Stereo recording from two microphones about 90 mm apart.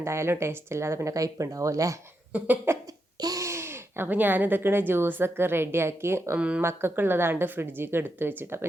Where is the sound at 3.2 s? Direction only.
40° right (ahead or behind).